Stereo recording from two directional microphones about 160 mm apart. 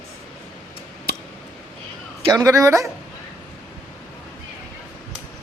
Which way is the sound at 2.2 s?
20° right (ahead or behind).